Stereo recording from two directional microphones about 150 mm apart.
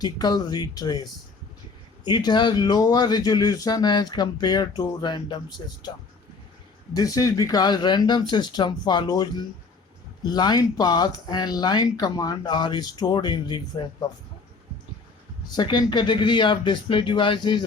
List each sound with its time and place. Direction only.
0.0 s speech: 25° left (ahead or behind)
2.0 s speech: 30° left (ahead or behind)
6.9 s speech: 25° left (ahead or behind)
15.4 s speech: 30° left (ahead or behind)